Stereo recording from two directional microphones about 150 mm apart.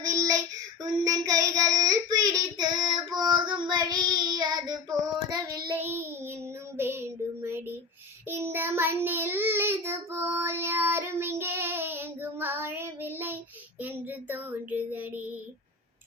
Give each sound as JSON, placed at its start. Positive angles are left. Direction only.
{"t": 0.0, "sound": "child singing", "side_deg": -25}